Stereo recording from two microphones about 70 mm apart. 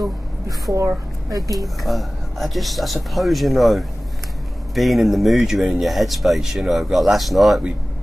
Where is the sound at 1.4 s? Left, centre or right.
Centre.